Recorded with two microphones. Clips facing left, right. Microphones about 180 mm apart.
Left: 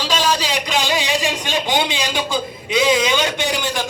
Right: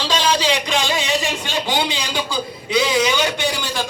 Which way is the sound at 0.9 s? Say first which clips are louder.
Left 1 dB; 15° left (ahead or behind).